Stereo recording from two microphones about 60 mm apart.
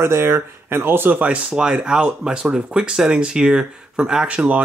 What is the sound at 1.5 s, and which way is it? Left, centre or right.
Speech, centre.